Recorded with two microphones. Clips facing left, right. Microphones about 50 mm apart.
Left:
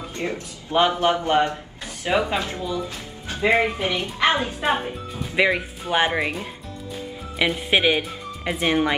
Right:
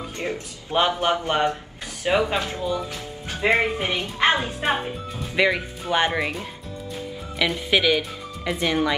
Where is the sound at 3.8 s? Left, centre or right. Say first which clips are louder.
Left 1 dB; right.